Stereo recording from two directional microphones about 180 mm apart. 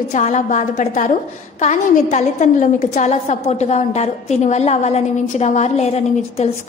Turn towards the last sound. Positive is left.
turn(degrees=35)  # may be behind; listen again after turning